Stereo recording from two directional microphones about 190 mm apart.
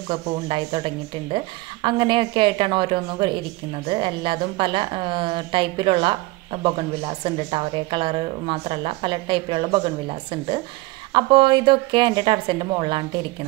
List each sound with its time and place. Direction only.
0.1 s a woman's voice: 30° right (ahead or behind)